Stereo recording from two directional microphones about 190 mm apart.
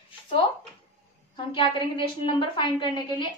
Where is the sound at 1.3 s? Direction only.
25° left (ahead or behind).